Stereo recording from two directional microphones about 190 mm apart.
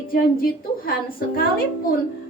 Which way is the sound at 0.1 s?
50° left (ahead or behind).